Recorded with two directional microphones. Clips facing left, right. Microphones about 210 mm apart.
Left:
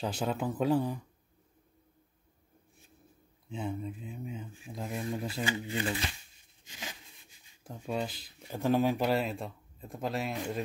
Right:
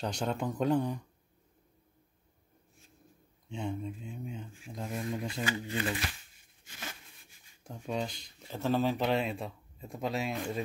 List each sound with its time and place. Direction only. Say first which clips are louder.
0.0 s speech: left 1 dB; 5° left (ahead or behind)
3.4 s speech: even; centre (ahead or behind)
5.5 s speech: even; 20° left (ahead or behind)
6.6 s a sound: even; 15° left (ahead or behind)
7.6 s speech: left 1 dB; centre (ahead or behind)